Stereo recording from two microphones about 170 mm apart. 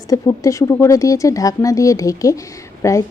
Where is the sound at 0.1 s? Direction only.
20° left (ahead or behind).